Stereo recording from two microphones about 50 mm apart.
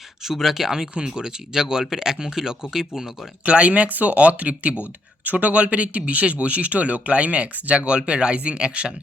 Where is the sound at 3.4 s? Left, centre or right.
Right.